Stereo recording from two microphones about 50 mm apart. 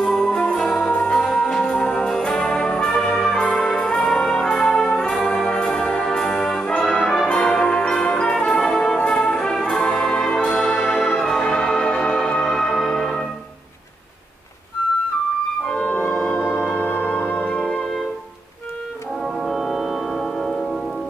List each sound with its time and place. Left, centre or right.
0.0 s jingle bell: centre
1.1 s music: centre
2.0 s brass instrument: centre
6.9 s music: centre
8.5 s brass instrument: centre
11.2 s music: centre
15.6 s music: left
16.9 s music: left
17.4 s music: centre
19.2 s music: centre